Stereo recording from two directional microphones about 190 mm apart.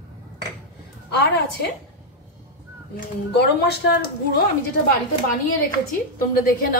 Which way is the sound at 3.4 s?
55° left (ahead or behind).